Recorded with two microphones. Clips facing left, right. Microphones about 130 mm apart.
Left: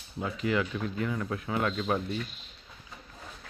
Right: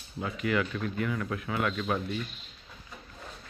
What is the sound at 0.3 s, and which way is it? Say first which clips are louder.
Speech: even; 25° left (ahead or behind).